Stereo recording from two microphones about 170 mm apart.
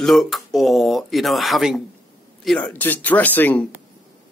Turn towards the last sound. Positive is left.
turn(degrees=10)  # may be behind; listen again after turning